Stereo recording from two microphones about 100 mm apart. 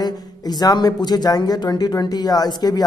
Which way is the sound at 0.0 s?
40° left (ahead or behind).